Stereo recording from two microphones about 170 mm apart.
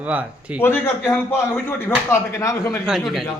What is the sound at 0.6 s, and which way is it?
A man's voice, 15° left (ahead or behind).